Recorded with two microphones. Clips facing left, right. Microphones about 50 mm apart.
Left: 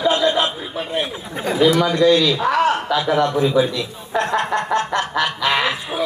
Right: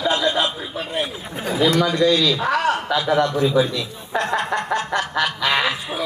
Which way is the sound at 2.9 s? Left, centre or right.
Centre.